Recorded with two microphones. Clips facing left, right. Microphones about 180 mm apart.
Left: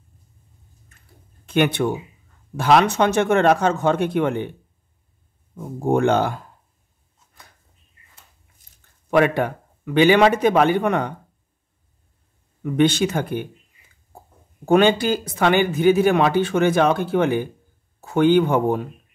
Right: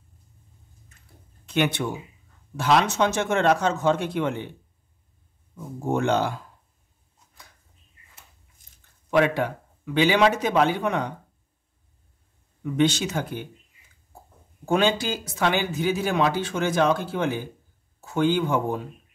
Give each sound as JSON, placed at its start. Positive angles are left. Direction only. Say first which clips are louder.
{"t": 1.4, "sound": "speech", "louder": "left 5 dB", "side_deg": 55}
{"t": 5.9, "sound": "speech", "louder": "left 5 dB", "side_deg": 55}
{"t": 9.1, "sound": "speech", "louder": "left 3 dB", "side_deg": 55}
{"t": 12.6, "sound": "speech", "louder": "left 4 dB", "side_deg": 55}
{"t": 14.7, "sound": "speech", "louder": "left 6 dB", "side_deg": 60}